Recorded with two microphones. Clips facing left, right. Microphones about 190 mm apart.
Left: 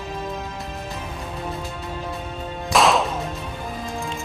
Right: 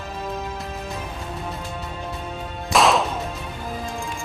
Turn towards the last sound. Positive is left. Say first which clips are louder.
# even
turn(degrees=0)  # may be behind; listen again after turning